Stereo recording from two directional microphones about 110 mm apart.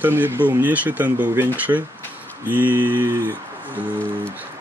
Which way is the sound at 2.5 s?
15° right (ahead or behind).